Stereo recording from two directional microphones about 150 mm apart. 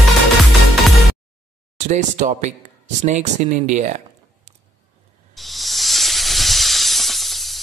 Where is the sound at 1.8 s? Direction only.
55° right (ahead or behind).